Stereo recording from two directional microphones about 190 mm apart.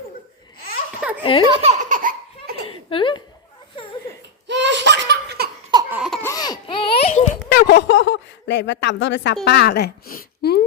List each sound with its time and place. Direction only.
1.2 s baby laughter: 25° left (ahead or behind)
1.5 s speech: 25° right (ahead or behind)
1.8 s laughter: 45° right (ahead or behind)
2.6 s a sound: 25° left (ahead or behind)
4.4 s laughter: 65° right (ahead or behind)
5.9 s laughter: 5° right (ahead or behind)
6.2 s baby cry: 20° left (ahead or behind)
7.5 s a woman's voice: 60° left (ahead or behind)